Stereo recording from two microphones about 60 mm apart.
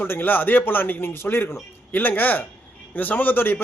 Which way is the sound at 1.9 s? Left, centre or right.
Left.